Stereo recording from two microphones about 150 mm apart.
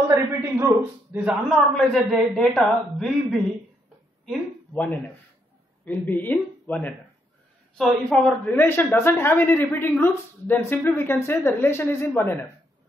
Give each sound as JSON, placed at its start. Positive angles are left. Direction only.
{"t": 0.1, "sound": "a man's voice", "side_deg": -15}
{"t": 1.8, "sound": "a woman's voice", "side_deg": 5}
{"t": 8.5, "sound": "speech", "side_deg": 15}